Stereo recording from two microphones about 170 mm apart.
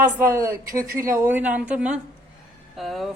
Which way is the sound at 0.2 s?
15° right (ahead or behind).